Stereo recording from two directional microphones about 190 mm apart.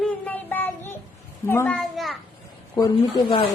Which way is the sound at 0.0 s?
10° left (ahead or behind).